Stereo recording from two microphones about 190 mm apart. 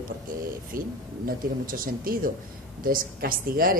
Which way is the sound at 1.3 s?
50° right (ahead or behind).